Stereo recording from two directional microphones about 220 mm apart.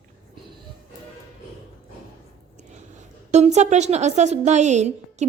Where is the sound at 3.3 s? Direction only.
30° right (ahead or behind).